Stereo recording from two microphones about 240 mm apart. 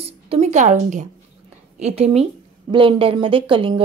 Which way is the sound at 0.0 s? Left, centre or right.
Right.